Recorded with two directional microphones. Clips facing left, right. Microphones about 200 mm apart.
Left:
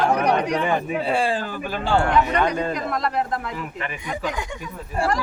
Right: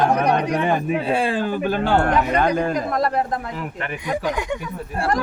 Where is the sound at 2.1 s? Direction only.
40° right (ahead or behind).